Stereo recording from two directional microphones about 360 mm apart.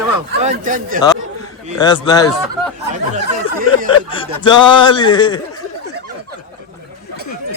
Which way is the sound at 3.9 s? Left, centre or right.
Centre.